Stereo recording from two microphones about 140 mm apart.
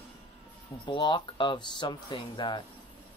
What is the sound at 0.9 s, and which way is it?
Speech, 35° left (ahead or behind).